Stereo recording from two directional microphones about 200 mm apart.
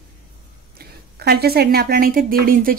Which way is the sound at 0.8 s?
50° right (ahead or behind).